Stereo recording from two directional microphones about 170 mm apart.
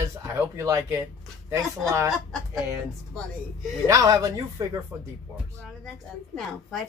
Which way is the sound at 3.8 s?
20° right (ahead or behind).